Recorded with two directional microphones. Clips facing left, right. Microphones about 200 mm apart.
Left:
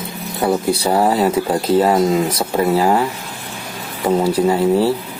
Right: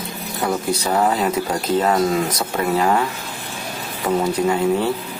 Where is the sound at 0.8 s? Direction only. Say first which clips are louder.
Left 3 dB; 30° left (ahead or behind).